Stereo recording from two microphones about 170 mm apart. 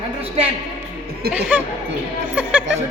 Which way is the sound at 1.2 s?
65° right (ahead or behind).